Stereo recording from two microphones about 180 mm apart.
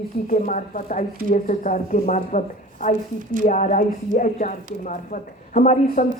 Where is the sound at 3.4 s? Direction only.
45° left (ahead or behind).